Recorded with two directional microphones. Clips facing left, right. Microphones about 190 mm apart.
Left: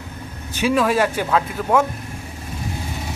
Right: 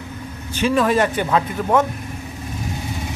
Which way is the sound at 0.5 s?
10° left (ahead or behind).